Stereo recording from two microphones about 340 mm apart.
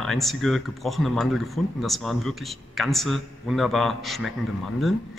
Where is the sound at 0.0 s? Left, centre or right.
Centre.